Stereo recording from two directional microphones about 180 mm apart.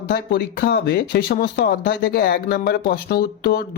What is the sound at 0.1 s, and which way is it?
Speech, 55° left (ahead or behind).